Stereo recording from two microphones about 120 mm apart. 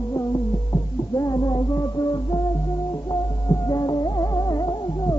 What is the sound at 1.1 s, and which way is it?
Music, 30° left (ahead or behind).